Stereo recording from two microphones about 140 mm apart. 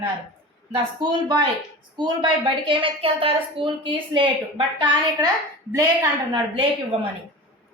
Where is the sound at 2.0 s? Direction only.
35° right (ahead or behind).